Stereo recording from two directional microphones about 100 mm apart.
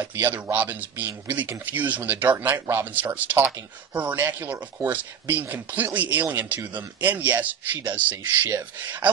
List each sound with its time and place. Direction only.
0.1 s speech: 20° right (ahead or behind)